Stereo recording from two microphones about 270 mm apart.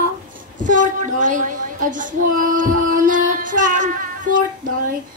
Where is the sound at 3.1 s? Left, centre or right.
Right.